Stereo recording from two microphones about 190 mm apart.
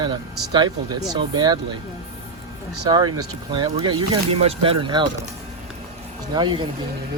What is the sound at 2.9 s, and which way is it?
Speech, 20° right (ahead or behind).